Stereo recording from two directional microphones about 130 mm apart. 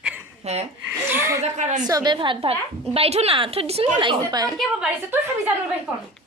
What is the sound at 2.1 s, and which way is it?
A woman's voice, 40° right (ahead or behind).